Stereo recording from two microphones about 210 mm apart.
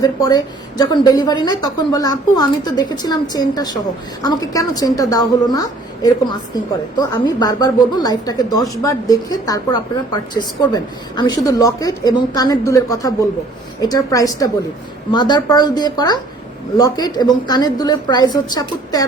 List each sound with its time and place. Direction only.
0.0 s a woman's voice: 15° left (ahead or behind)